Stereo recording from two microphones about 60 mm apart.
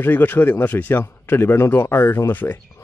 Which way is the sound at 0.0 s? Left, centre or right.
Left.